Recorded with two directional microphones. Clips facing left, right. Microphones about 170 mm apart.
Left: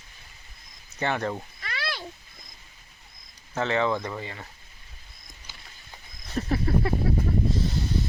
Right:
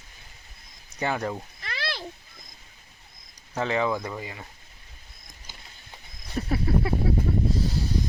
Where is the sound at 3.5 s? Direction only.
10° right (ahead or behind).